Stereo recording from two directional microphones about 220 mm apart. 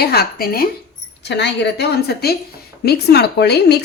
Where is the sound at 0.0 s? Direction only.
45° left (ahead or behind).